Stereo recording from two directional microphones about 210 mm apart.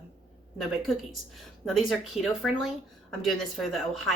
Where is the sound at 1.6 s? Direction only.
Centre (ahead or behind).